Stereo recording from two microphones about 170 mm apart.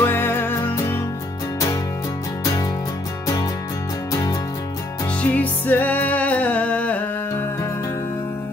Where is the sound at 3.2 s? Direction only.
20° left (ahead or behind).